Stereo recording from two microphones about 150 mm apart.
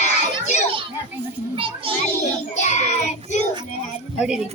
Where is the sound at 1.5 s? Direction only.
35° right (ahead or behind).